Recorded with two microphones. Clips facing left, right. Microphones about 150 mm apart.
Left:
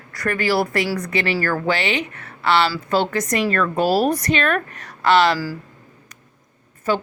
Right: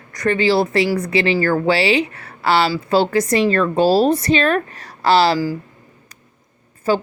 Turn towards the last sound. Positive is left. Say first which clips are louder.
# right 3 dB
turn(degrees=-35)  # may be behind; listen again after turning